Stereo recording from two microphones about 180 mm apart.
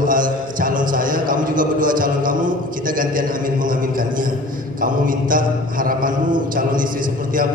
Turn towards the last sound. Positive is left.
turn(degrees=-50)  # may be behind; listen again after turning